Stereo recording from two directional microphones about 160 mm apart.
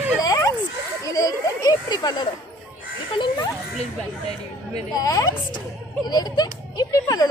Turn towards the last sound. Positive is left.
turn(degrees=20)  # may be behind; listen again after turning